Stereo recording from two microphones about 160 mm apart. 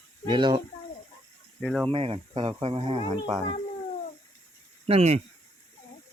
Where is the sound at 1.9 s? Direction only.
35° right (ahead or behind).